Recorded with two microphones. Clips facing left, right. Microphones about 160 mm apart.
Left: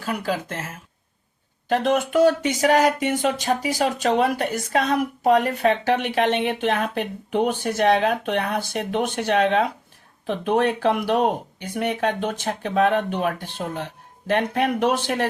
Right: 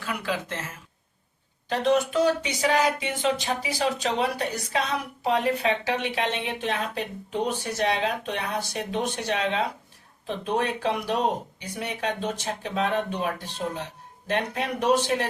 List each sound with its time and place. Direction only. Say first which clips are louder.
0.0 s speech: left 4 dB; 40° left (ahead or behind)
1.7 s speech: left 3 dB; 55° left (ahead or behind)